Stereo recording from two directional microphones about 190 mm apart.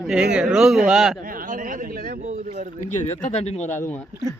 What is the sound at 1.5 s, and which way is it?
Speech, 45° right (ahead or behind).